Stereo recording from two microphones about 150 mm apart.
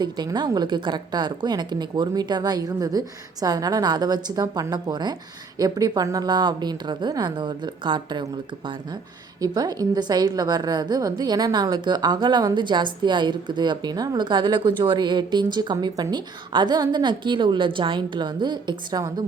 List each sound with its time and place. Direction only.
0.0 s a woman's voice: 30° right (ahead or behind)